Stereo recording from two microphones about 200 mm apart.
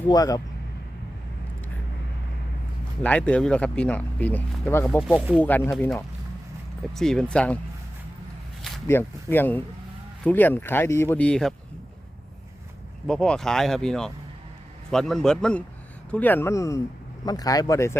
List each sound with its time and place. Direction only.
0.1 s speech: 20° left (ahead or behind)
3.0 s speech: 5° left (ahead or behind)
5.0 s speech: 5° right (ahead or behind)
5.4 s speech: 10° left (ahead or behind)
8.9 s speech: 10° left (ahead or behind)
13.1 s speech: 5° left (ahead or behind)